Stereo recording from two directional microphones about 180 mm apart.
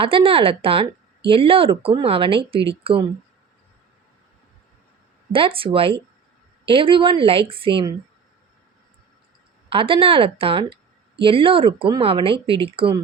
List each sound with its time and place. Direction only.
0.0 s speech: 30° right (ahead or behind)
5.3 s a woman's voice: 30° right (ahead or behind)
9.6 s a woman's voice: 30° right (ahead or behind)